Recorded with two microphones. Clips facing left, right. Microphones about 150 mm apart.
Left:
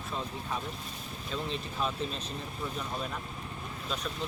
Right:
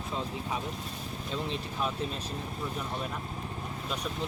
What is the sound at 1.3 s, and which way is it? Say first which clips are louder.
Speech: even; 15° right (ahead or behind).